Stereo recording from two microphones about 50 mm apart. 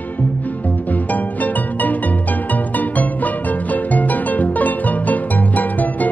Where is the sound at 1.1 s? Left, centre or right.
Left.